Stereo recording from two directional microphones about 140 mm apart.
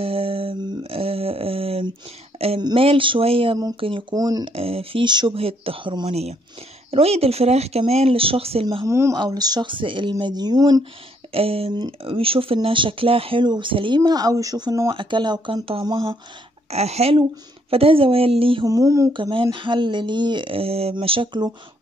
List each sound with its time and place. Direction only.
0.0 s a sound: 40° right (ahead or behind)
2.3 s speech: 45° right (ahead or behind)
4.1 s speech: 25° right (ahead or behind)
4.5 s speech: 45° right (ahead or behind)
8.8 s speech: 20° right (ahead or behind)
11.3 s speech: 45° right (ahead or behind)
16.7 s speech: 50° right (ahead or behind)
18.7 s speech: 25° right (ahead or behind)
19.5 s speech: 35° right (ahead or behind)